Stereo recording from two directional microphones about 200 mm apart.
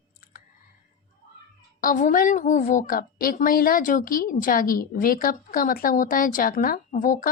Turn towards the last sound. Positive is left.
turn(degrees=40)  # may be behind; listen again after turning